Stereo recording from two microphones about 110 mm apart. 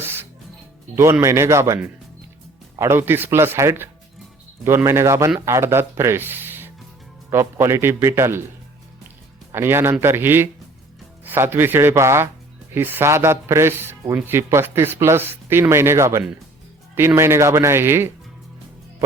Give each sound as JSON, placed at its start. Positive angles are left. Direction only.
{"t": 0.0, "sound": "music", "side_deg": -20}
{"t": 1.2, "sound": "speech", "side_deg": -25}
{"t": 9.5, "sound": "speech", "side_deg": -25}